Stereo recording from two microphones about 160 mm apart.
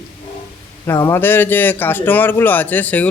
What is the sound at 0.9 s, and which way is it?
Speech, 15° left (ahead or behind).